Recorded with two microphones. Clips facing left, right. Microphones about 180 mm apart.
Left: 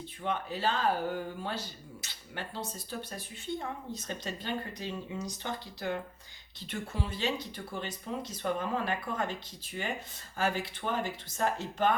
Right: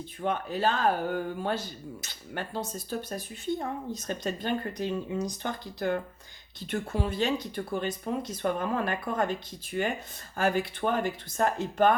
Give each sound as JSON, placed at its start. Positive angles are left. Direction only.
{"t": 0.2, "sound": "speech", "side_deg": -50}
{"t": 10.3, "sound": "speech", "side_deg": -50}